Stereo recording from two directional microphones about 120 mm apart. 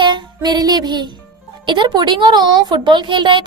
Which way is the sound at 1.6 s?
40° right (ahead or behind).